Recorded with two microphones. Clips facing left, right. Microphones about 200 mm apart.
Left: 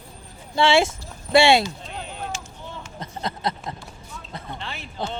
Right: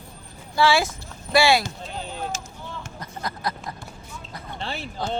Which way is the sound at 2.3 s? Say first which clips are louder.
Even; 40° right (ahead or behind).